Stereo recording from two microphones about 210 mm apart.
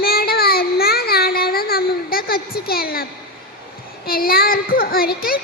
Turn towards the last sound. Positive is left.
turn(degrees=45)  # may be behind; listen again after turning